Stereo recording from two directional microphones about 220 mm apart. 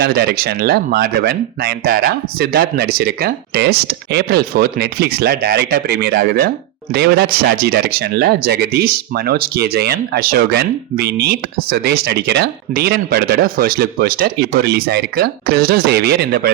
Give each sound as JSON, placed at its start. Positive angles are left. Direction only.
{"t": 0.0, "sound": "speech", "side_deg": -45}